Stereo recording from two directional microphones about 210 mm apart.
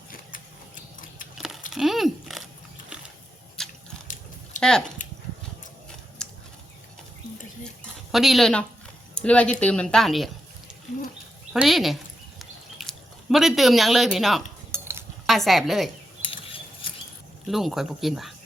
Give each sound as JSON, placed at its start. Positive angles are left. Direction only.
{"t": 0.1, "sound": "mechanisms", "side_deg": 40}
{"t": 1.4, "sound": "a sound", "side_deg": 0}
{"t": 8.1, "sound": "a woman's voice", "side_deg": 0}
{"t": 11.5, "sound": "a woman's voice", "side_deg": 0}
{"t": 12.4, "sound": "a sound", "side_deg": 0}
{"t": 14.7, "sound": "cutlery", "side_deg": -10}
{"t": 15.3, "sound": "a woman's voice", "side_deg": 0}
{"t": 16.2, "sound": "a sound", "side_deg": 25}
{"t": 17.5, "sound": "a woman's voice", "side_deg": 0}